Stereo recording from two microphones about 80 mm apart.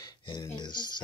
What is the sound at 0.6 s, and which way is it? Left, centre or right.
Speech, left.